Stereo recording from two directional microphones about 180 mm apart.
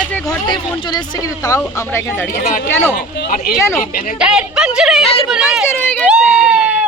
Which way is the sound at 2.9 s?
60° left (ahead or behind).